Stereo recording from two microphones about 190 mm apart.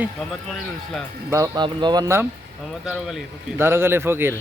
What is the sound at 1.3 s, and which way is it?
Speech, 15° right (ahead or behind).